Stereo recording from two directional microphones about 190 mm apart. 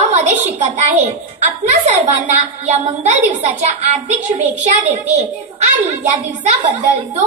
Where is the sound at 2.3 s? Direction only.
35° right (ahead or behind).